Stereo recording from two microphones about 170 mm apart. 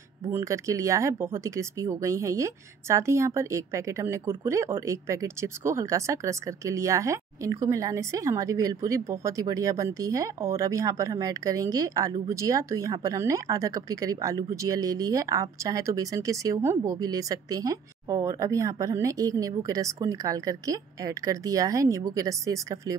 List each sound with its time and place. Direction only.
0.2 s speech: 15° right (ahead or behind)